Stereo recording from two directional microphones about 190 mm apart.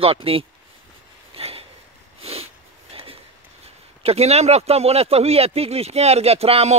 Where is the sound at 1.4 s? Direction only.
30° right (ahead or behind).